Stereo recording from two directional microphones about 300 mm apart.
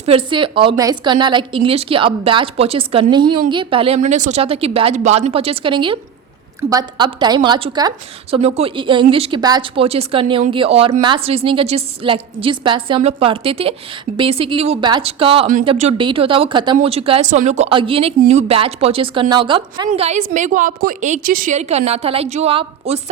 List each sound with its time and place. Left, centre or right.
0.0 s a woman's voice: centre